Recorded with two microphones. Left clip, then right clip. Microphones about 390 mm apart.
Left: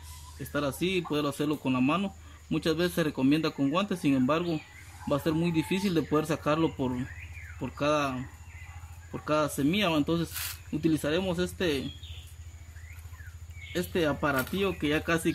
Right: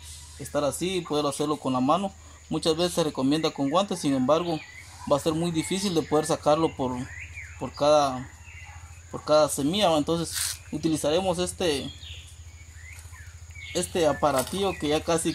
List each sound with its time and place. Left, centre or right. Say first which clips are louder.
0.5 s speech: right 3 dB; centre
9.2 s speech: right 6 dB; centre
13.7 s speech: right 5 dB; centre